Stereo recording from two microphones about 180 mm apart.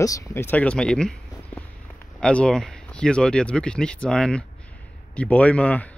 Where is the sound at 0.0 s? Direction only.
15° left (ahead or behind).